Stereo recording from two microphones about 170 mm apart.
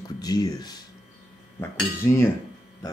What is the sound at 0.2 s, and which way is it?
Speech, 20° left (ahead or behind).